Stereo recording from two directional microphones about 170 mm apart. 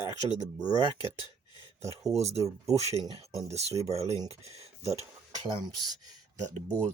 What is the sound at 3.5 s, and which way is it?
Speech, 40° right (ahead or behind).